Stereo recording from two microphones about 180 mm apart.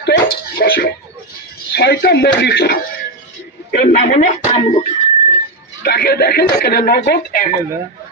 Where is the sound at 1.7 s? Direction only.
65° left (ahead or behind).